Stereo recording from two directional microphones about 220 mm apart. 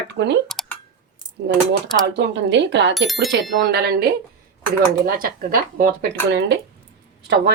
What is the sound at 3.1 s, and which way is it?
Speech, centre (ahead or behind).